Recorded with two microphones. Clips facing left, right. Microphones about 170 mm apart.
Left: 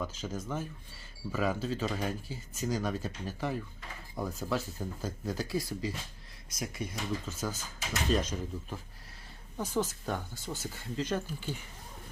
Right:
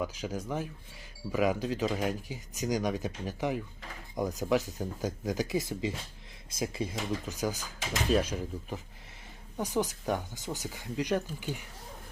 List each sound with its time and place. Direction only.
0.0 s speech: 15° right (ahead or behind)
7.3 s speech: 15° right (ahead or behind)